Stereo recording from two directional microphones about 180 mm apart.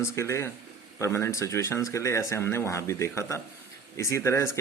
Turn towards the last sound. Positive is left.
turn(degrees=15)  # may be behind; listen again after turning